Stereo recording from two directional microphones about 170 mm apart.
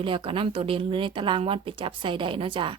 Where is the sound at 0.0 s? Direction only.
30° right (ahead or behind).